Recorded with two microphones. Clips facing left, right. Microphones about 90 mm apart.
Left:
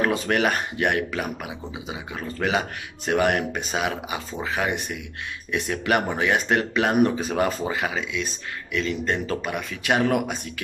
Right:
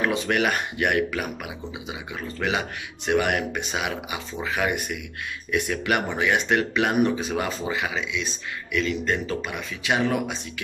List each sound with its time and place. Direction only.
0.0 s a man's voice: 40° left (ahead or behind)